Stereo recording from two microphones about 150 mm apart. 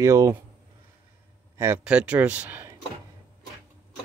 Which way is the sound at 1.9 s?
10° right (ahead or behind).